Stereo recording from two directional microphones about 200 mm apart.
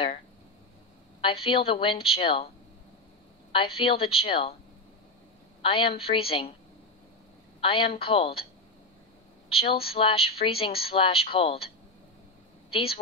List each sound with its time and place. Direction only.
1.2 s a woman's voice: 25° left (ahead or behind)
3.5 s a woman's voice: 30° left (ahead or behind)
5.6 s a woman's voice: 25° left (ahead or behind)
7.6 s a woman's voice: 25° left (ahead or behind)
9.5 s a woman's voice: 30° left (ahead or behind)
12.7 s a woman's voice: 25° left (ahead or behind)